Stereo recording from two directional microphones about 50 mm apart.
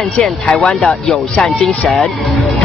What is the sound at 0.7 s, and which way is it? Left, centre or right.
Speech, centre.